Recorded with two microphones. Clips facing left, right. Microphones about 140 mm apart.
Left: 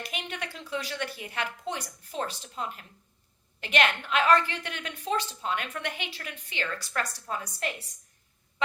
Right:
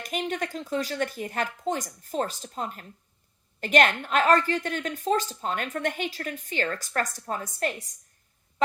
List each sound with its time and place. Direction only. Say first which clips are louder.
0.0 s a woman's voice: right 7 dB; 45° right (ahead or behind)